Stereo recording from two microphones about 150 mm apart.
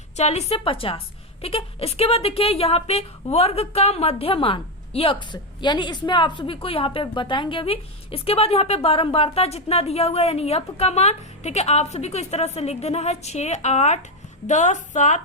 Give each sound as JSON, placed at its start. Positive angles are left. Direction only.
{"t": 0.2, "sound": "a woman's voice", "side_deg": 45}